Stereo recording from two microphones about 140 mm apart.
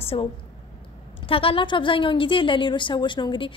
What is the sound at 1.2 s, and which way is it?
A woman's voice, 40° left (ahead or behind).